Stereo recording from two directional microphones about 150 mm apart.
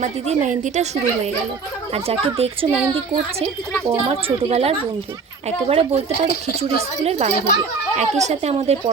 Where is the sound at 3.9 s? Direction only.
40° right (ahead or behind).